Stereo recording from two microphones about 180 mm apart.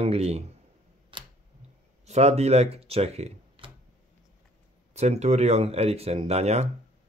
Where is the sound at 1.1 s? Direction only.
30° right (ahead or behind).